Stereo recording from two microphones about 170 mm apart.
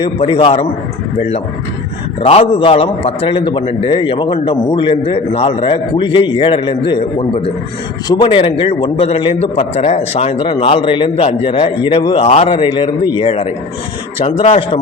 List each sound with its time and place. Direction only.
0.0 s a man's voice: 30° left (ahead or behind)
2.2 s a man's voice: 35° left (ahead or behind)